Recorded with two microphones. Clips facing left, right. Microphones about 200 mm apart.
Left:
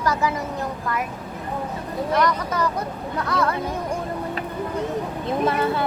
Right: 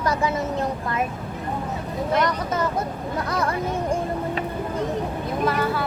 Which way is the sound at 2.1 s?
25° right (ahead or behind).